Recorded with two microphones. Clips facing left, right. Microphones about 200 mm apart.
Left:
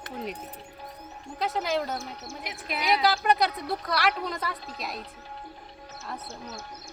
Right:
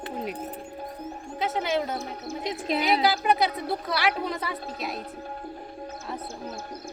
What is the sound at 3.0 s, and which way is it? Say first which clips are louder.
Speech: right 1 dB; centre (ahead or behind).